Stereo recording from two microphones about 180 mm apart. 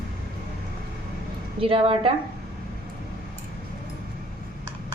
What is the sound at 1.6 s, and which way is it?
Speech, 30° right (ahead or behind).